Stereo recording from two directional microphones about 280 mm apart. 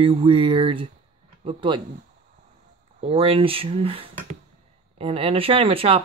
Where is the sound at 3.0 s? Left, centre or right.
Centre.